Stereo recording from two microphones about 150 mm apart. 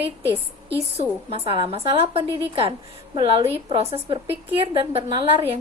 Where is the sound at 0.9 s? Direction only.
40° right (ahead or behind).